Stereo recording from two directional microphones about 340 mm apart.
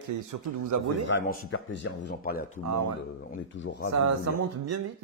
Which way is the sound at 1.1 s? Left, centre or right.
Left.